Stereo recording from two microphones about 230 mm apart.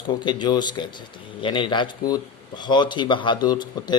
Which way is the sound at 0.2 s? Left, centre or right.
Centre.